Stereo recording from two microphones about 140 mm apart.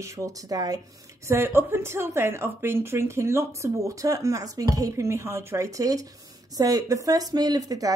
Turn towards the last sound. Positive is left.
turn(degrees=-25)  # may be behind; listen again after turning